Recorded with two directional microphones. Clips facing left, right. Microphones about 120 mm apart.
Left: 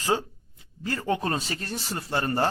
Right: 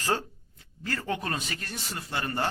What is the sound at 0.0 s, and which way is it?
Speech, 15° left (ahead or behind).